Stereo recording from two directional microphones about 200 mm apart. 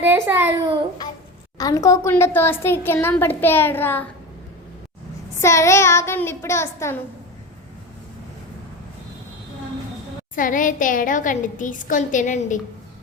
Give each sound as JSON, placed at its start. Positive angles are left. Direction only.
{"t": 0.0, "sound": "a child's voice", "side_deg": -10}
{"t": 1.5, "sound": "a woman's voice", "side_deg": 20}
{"t": 5.4, "sound": "a woman's voice", "side_deg": 15}
{"t": 10.3, "sound": "a woman's voice", "side_deg": 40}